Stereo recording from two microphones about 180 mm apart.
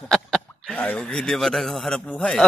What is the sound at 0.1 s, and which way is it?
Speech, 5° left (ahead or behind).